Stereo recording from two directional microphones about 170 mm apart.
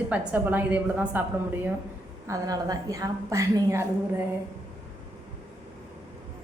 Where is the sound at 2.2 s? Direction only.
20° right (ahead or behind).